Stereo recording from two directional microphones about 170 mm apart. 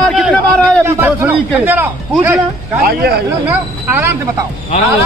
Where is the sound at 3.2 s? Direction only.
15° right (ahead or behind).